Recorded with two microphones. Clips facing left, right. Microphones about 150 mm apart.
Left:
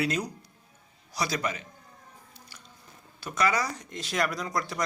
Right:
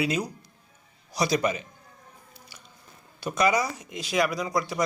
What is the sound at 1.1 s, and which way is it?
Speech, 15° right (ahead or behind).